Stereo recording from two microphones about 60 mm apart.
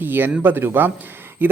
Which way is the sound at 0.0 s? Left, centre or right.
Right.